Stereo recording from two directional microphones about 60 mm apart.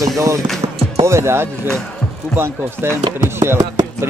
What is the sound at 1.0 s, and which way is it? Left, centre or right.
Speech, right.